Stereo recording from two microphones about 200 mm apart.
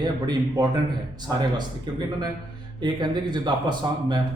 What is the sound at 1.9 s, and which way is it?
A man's voice, 20° right (ahead or behind).